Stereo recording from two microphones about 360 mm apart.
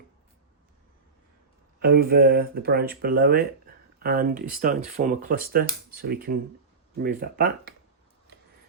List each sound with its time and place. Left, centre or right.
1.8 s speech: right